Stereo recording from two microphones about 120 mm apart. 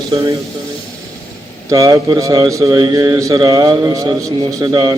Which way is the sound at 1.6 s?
30° right (ahead or behind).